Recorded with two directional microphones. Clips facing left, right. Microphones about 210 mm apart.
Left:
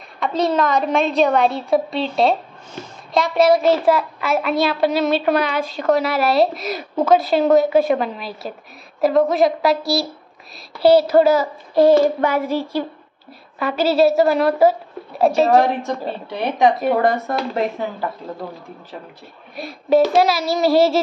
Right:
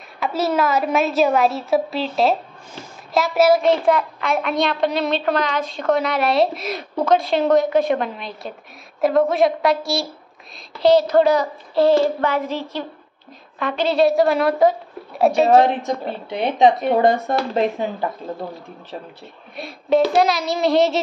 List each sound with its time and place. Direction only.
0.2 s a woman's voice: 5° right (ahead or behind)
10.8 s child singing: 10° left (ahead or behind)
13.6 s a woman's voice: 5° left (ahead or behind)
15.5 s speech: 20° right (ahead or behind)
19.5 s a woman's voice: centre (ahead or behind)